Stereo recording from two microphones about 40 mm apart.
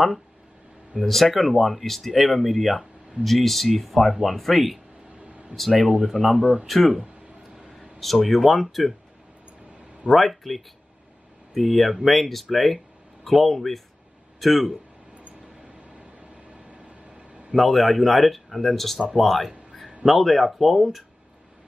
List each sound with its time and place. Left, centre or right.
1.0 s speech: centre
2.8 s a sound: right
3.3 s speech: centre
5.2 s a sound: right
6.0 s speech: centre
6.3 s speech: centre
6.7 s speech: centre
8.0 s speech: centre
10.1 s speech: centre
16.7 s vehicle: right
17.6 s speech: centre